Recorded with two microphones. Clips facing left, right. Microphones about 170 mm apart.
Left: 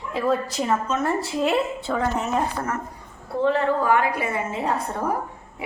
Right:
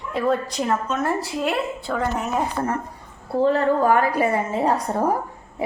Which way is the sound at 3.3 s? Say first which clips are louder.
Right 2 dB; 40° right (ahead or behind).